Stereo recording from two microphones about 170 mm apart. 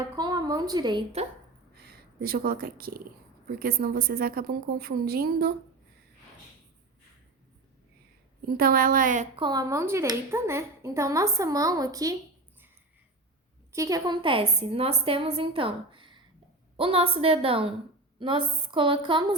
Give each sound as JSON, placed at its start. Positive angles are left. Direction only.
{"t": 0.2, "sound": "a woman's voice", "side_deg": -25}
{"t": 2.2, "sound": "a woman's voice", "side_deg": -60}
{"t": 8.5, "sound": "a woman's voice", "side_deg": -60}
{"t": 9.3, "sound": "speech", "side_deg": -25}
{"t": 13.7, "sound": "a woman's voice", "side_deg": -20}